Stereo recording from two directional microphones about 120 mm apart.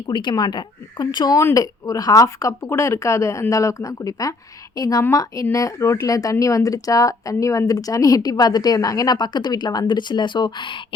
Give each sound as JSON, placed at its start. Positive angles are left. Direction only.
{"t": 0.1, "sound": "a woman's voice", "side_deg": 40}